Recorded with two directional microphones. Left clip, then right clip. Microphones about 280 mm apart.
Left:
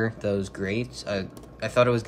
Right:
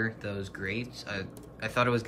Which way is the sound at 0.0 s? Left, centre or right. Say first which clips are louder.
Left 7 dB; centre.